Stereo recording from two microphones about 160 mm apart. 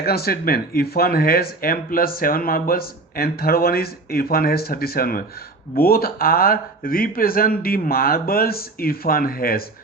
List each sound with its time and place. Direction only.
0.0 s speech: 75° left (ahead or behind)